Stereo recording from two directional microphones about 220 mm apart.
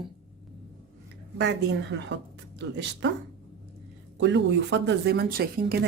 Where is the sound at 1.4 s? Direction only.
50° right (ahead or behind).